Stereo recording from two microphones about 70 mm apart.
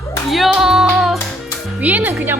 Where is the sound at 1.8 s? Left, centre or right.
Right.